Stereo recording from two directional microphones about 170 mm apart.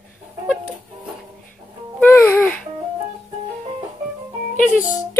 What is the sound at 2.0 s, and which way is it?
Music, 10° left (ahead or behind).